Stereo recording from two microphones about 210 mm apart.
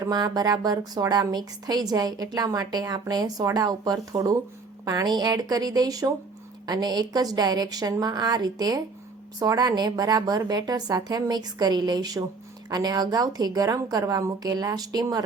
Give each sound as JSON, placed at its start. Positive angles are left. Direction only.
{"t": 0.0, "sound": "a woman's voice", "side_deg": -20}